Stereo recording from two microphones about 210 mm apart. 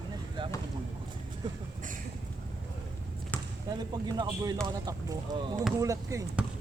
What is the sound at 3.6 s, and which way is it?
Speech, 20° right (ahead or behind).